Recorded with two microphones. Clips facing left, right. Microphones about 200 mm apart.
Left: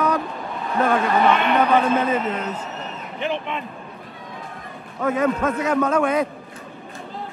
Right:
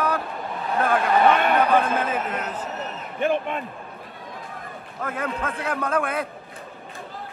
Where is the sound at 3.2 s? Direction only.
50° right (ahead or behind).